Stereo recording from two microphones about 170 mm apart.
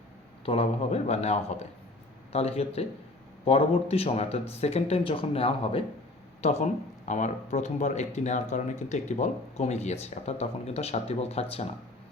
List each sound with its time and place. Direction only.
0.4 s speech: 35° left (ahead or behind)